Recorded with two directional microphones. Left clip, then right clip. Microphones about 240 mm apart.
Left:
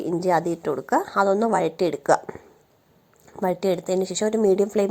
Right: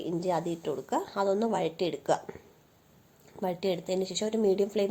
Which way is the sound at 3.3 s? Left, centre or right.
Left.